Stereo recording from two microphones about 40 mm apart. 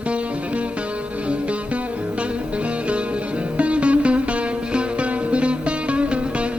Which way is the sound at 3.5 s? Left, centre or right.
Right.